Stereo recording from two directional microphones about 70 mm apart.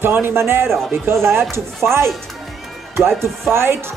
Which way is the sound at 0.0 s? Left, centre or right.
Right.